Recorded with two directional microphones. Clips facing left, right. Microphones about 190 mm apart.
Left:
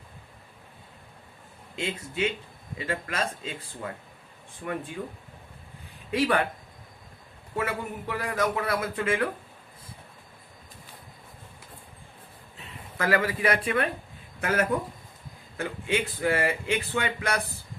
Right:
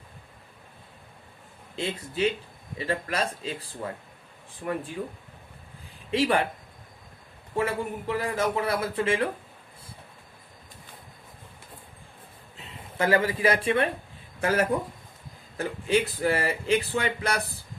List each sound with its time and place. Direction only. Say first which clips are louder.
1.7 s speech: right 1 dB; 35° right (ahead or behind)
6.1 s a man's voice: right 1 dB; 25° right (ahead or behind)
7.5 s a man's voice: right 3 dB; 30° right (ahead or behind)
13.0 s a man's voice: right 2 dB; 25° right (ahead or behind)